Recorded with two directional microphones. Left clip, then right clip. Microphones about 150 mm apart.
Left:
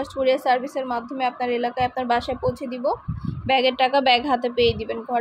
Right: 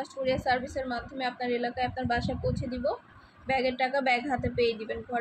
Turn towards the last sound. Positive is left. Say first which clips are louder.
# left 8 dB
turn(degrees=65)  # may be behind; listen again after turning